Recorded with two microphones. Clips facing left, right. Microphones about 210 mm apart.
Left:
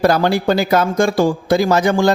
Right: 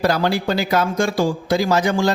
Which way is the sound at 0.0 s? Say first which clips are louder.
Left 4 dB; 50° left (ahead or behind).